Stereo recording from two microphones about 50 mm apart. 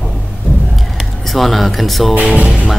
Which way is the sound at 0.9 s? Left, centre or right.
Centre.